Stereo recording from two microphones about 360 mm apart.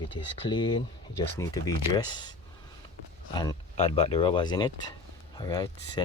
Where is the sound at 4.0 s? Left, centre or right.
Centre.